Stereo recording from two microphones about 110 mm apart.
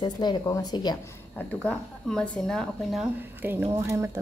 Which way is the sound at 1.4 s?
10° left (ahead or behind).